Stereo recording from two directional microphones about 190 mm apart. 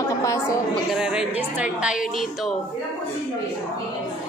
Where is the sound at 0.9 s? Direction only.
5° right (ahead or behind).